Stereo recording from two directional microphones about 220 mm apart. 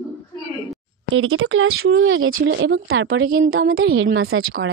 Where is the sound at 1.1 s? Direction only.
60° right (ahead or behind).